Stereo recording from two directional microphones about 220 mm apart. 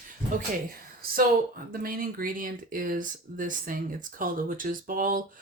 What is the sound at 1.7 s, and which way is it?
Speech, 40° right (ahead or behind).